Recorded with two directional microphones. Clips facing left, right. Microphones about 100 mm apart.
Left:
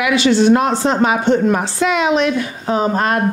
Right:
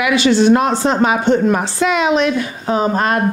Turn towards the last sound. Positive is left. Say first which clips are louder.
# right 1 dB
turn(degrees=-25)  # may be behind; listen again after turning